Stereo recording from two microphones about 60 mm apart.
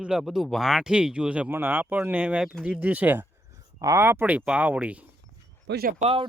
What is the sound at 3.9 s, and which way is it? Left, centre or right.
Speech, right.